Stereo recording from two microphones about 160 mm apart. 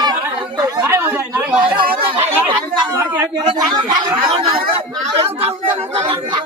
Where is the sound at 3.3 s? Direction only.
25° right (ahead or behind).